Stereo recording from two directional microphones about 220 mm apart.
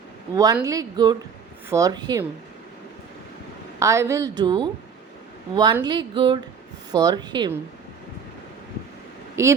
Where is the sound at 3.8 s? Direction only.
15° right (ahead or behind).